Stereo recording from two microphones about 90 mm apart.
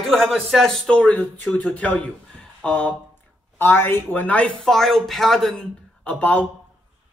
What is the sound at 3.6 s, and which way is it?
Speech, 25° left (ahead or behind).